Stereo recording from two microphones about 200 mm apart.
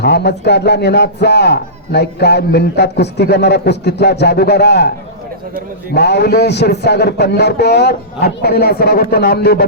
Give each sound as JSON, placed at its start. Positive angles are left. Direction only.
{"t": 0.0, "sound": "a man's voice", "side_deg": 55}
{"t": 5.9, "sound": "a man's voice", "side_deg": 55}